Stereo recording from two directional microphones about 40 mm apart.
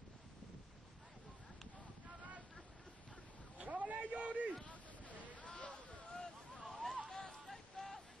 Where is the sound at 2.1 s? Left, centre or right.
Right.